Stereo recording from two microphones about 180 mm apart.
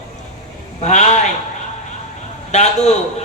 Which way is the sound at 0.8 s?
40° left (ahead or behind).